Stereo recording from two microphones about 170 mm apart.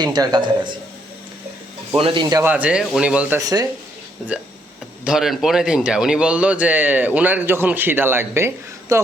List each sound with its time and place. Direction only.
0.0 s a man's voice: 25° right (ahead or behind)
2.0 s a man's voice: 30° right (ahead or behind)
2.4 s speech: 10° right (ahead or behind)
3.4 s a man's voice: 20° right (ahead or behind)
5.0 s speech: centre (ahead or behind)